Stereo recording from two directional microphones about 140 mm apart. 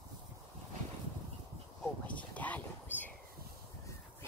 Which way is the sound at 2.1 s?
10° left (ahead or behind).